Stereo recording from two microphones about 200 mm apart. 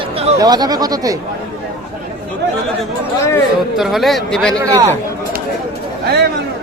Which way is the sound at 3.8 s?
Centre (ahead or behind).